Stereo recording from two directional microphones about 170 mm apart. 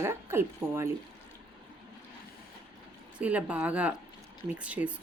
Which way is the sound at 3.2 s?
10° right (ahead or behind).